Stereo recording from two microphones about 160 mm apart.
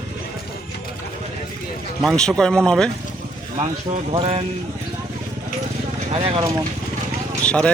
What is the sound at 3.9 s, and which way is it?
Speech, 35° right (ahead or behind).